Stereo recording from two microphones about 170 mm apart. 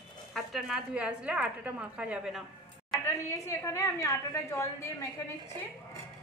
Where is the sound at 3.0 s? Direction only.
15° left (ahead or behind).